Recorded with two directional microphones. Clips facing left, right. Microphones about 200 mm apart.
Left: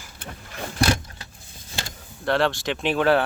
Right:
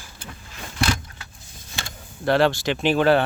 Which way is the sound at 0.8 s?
35° left (ahead or behind).